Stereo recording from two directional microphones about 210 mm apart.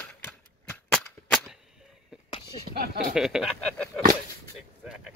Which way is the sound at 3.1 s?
Centre (ahead or behind).